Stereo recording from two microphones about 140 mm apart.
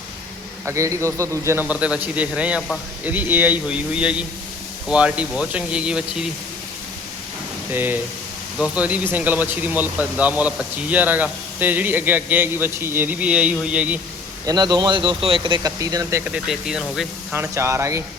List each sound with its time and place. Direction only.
0.6 s speech: 20° right (ahead or behind)
7.7 s speech: 15° right (ahead or behind)
14.4 s speech: 30° right (ahead or behind)
16.2 s speech: 5° right (ahead or behind)
17.3 s speech: 20° right (ahead or behind)